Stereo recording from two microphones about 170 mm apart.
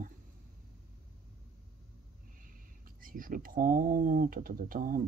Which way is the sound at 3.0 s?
55° right (ahead or behind).